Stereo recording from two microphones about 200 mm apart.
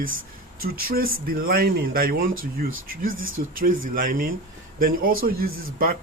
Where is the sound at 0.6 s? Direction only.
45° right (ahead or behind).